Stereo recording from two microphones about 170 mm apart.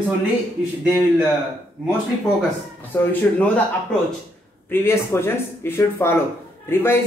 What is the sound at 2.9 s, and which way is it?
Speech, 10° left (ahead or behind).